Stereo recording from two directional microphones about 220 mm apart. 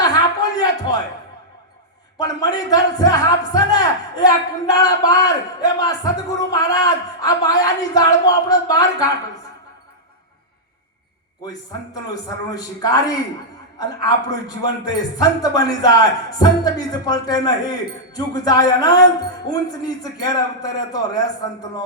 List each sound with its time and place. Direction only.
0.0 s a sound: 15° left (ahead or behind)
2.1 s speech: 15° left (ahead or behind)
12.1 s speech: 15° left (ahead or behind)